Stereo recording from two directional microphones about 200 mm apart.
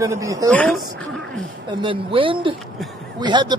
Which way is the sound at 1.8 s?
25° right (ahead or behind).